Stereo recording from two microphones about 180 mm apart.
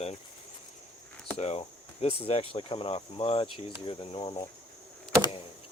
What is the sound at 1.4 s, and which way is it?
Speech, 35° left (ahead or behind).